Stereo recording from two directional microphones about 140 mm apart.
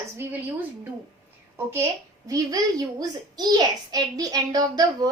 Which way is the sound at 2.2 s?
25° right (ahead or behind).